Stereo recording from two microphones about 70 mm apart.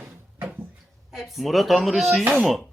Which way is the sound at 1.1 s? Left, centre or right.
Centre.